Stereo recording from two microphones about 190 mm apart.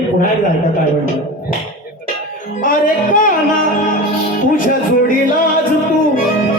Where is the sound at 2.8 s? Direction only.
45° left (ahead or behind).